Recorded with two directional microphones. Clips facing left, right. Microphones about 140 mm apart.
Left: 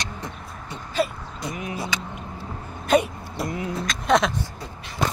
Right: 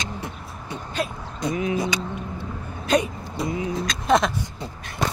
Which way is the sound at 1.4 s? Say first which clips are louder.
Right 7 dB; 20° right (ahead or behind).